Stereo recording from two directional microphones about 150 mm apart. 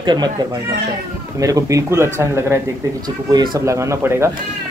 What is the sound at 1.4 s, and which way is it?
Speech, 20° right (ahead or behind).